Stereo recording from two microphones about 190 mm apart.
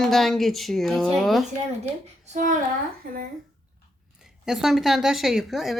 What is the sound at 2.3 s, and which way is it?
Hands, 45° right (ahead or behind).